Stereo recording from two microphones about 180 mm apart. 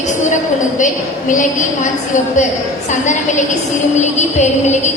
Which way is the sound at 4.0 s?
40° left (ahead or behind).